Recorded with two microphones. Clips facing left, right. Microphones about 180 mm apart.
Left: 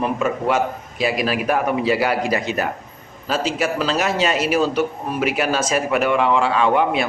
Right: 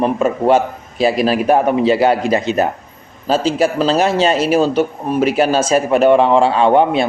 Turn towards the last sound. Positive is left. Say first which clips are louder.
# right 5 dB
turn(degrees=-30)  # may be behind; listen again after turning